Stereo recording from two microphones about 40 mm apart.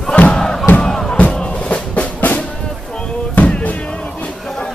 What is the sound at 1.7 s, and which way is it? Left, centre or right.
Music, left.